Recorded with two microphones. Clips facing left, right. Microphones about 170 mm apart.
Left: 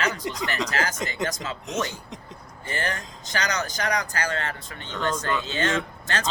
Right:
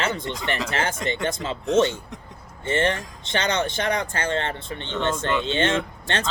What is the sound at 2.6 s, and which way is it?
Speech, 25° right (ahead or behind).